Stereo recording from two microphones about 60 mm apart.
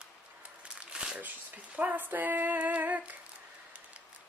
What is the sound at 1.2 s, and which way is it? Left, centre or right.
Speech, right.